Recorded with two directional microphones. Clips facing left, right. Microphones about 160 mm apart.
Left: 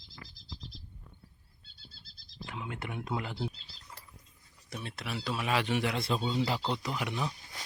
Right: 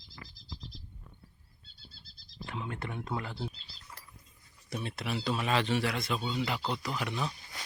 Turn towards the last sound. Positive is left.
turn(degrees=15)  # may be behind; listen again after turning